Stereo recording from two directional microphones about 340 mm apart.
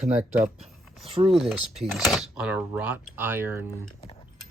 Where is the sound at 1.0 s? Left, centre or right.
Centre.